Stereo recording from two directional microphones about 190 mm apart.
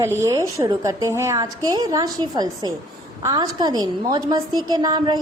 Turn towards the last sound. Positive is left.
turn(degrees=-20)  # may be behind; listen again after turning